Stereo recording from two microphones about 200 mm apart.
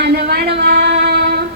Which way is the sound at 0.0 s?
55° right (ahead or behind).